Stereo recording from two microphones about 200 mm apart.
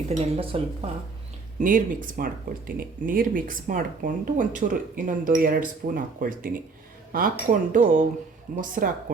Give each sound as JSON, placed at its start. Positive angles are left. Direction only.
{"t": 0.1, "sound": "speech", "side_deg": -30}
{"t": 1.6, "sound": "speech", "side_deg": -45}